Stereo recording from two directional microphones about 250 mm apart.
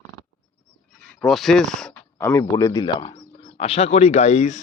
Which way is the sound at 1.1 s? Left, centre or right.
Centre.